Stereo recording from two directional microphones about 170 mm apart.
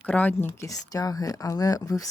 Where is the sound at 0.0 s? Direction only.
10° left (ahead or behind).